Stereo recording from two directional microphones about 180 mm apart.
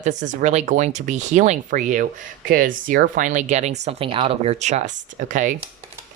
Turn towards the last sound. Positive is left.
turn(degrees=-45)  # may be behind; listen again after turning